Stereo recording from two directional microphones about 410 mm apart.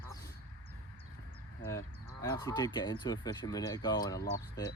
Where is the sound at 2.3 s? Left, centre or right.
Centre.